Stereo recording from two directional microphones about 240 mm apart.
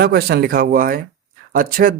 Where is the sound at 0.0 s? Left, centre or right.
Right.